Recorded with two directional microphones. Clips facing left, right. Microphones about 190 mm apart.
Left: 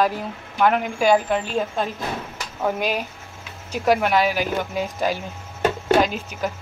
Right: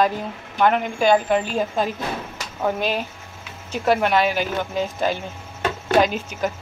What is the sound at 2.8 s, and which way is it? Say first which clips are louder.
Speech: even; 10° left (ahead or behind).